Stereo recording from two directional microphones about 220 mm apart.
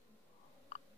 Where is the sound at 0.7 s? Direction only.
30° left (ahead or behind).